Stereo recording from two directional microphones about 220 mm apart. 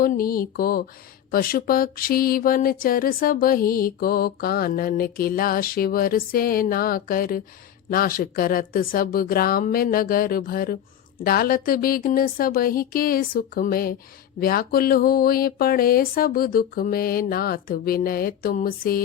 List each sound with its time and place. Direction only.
0.0 s speech: 40° left (ahead or behind)